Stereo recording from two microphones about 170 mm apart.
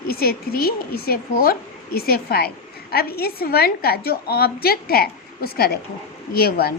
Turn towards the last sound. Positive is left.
turn(degrees=65)  # may be behind; listen again after turning